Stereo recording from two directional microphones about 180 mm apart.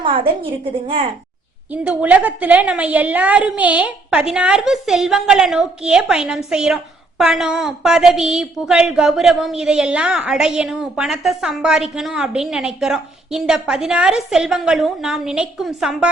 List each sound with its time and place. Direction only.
0.0 s a woman's voice: 30° right (ahead or behind)
1.7 s a woman's voice: 5° right (ahead or behind)